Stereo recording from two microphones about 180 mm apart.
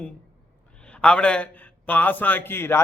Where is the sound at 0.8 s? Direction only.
5° left (ahead or behind).